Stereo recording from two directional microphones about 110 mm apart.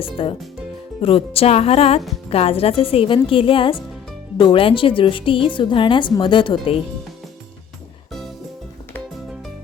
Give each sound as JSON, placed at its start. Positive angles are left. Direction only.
{"t": 0.0, "sound": "a woman's voice", "side_deg": 55}